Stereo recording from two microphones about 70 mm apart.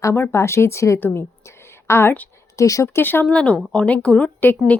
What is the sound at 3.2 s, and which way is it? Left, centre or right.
Speech, centre.